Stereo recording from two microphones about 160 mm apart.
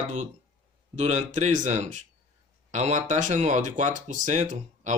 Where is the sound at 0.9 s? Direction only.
45° right (ahead or behind).